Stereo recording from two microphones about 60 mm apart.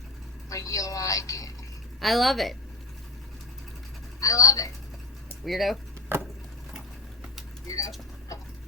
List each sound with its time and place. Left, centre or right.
0.5 s speech: left
2.0 s a woman's voice: centre
4.2 s speech: left
5.5 s a woman's voice: centre
6.1 s vehicle: right
7.7 s speech: left
8.3 s a sound: left